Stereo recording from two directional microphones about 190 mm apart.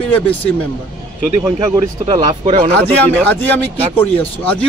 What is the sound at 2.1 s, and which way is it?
Speech, 25° right (ahead or behind).